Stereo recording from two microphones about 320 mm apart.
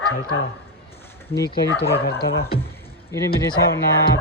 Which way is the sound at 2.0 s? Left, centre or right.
Left.